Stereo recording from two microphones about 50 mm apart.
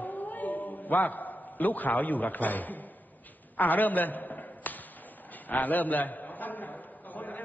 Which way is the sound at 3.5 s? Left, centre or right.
Left.